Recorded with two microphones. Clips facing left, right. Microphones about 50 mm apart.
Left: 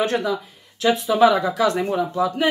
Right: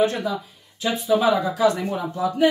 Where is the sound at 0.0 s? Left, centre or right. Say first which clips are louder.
Even; left.